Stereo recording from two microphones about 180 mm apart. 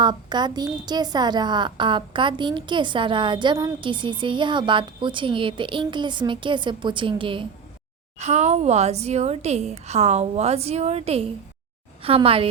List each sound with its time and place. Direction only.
0.0 s a woman's voice: 25° right (ahead or behind)
8.2 s a woman's voice: 40° right (ahead or behind)